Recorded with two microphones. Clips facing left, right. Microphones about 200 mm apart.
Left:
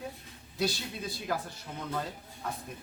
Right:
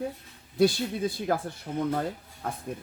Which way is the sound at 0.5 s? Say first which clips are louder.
Right 9 dB; 55° right (ahead or behind).